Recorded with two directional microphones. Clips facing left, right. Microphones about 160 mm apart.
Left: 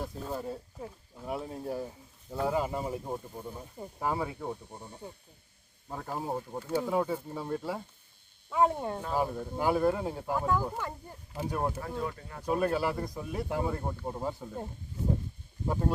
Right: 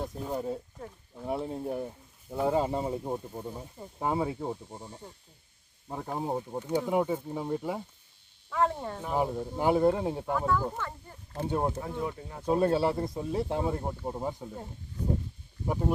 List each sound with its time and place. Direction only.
0.0 s speech: 20° right (ahead or behind)
4.0 s speech: 25° right (ahead or behind)
5.9 s speech: 15° right (ahead or behind)
8.4 s speech: 15° left (ahead or behind)
9.0 s speech: 15° right (ahead or behind)
10.3 s speech: 15° left (ahead or behind)
10.8 s a sound: 15° left (ahead or behind)
11.3 s speech: 25° right (ahead or behind)
15.6 s speech: 10° right (ahead or behind)